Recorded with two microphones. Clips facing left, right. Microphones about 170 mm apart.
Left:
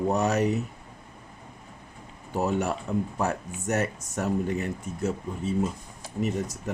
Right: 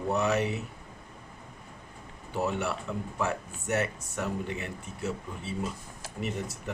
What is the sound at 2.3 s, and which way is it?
Speech, 40° left (ahead or behind).